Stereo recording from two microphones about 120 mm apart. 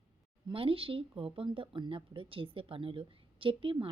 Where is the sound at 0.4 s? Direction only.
50° right (ahead or behind).